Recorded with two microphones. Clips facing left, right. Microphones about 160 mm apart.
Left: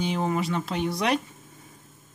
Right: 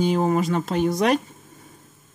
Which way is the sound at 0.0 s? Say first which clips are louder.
Right 6 dB; 45° right (ahead or behind).